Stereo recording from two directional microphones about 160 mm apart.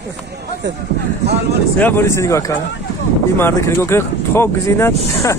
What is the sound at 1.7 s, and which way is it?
A man's voice, 10° left (ahead or behind).